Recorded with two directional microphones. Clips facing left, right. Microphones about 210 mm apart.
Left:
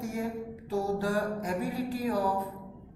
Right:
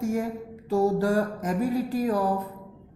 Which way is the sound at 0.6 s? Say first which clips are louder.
Right 7 dB; 50° right (ahead or behind).